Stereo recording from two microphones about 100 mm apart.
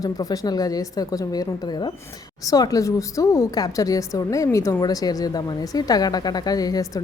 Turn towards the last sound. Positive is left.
turn(degrees=40)  # may be behind; listen again after turning